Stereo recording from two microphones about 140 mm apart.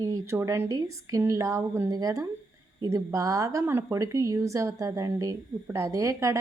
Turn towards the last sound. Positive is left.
turn(degrees=-20)  # may be behind; listen again after turning